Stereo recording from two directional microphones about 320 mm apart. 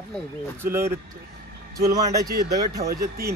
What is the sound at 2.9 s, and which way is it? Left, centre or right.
Speech, right.